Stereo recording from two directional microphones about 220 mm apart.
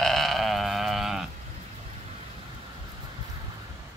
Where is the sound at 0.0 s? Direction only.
Centre (ahead or behind).